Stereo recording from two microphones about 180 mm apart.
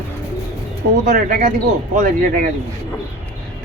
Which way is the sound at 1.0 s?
50° right (ahead or behind).